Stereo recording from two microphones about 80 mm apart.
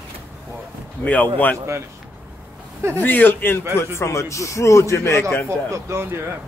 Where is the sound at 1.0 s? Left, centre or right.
Centre.